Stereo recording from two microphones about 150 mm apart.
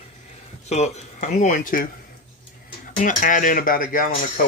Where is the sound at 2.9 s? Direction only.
60° left (ahead or behind).